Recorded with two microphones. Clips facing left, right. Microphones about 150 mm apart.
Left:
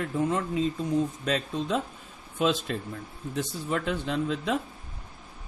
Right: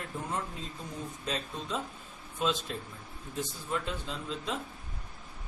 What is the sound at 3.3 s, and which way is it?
Speech, 75° left (ahead or behind).